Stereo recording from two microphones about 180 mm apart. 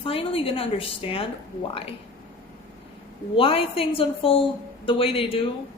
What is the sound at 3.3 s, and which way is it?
A woman's voice, 30° left (ahead or behind).